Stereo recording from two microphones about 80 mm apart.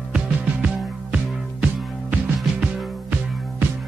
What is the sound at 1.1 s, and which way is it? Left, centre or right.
Music, centre.